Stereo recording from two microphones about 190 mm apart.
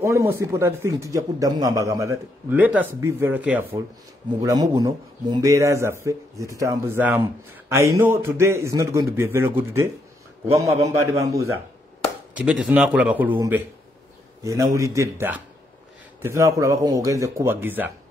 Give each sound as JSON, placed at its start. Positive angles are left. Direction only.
{"t": 0.0, "sound": "speech", "side_deg": -15}
{"t": 3.8, "sound": "speech", "side_deg": -20}
{"t": 12.4, "sound": "a man's voice", "side_deg": -5}